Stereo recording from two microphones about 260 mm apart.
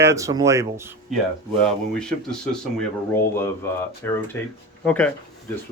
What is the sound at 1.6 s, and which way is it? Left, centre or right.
Speech, centre.